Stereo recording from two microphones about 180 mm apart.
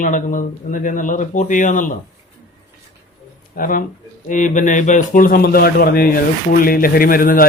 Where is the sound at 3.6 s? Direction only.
50° left (ahead or behind).